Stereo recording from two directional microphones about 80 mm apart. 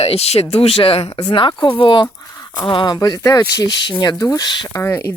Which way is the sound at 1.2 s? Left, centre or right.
Left.